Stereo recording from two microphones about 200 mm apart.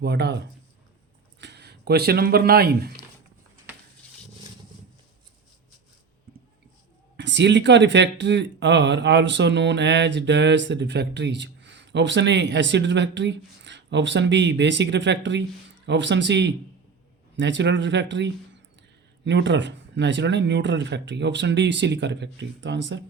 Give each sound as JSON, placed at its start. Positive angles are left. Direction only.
{"t": 0.0, "sound": "speech", "side_deg": -55}
{"t": 7.2, "sound": "speech", "side_deg": -60}